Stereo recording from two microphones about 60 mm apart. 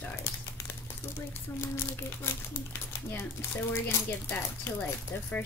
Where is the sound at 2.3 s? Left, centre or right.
Left.